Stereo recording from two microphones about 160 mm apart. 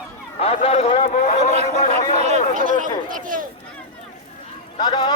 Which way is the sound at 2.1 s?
45° right (ahead or behind).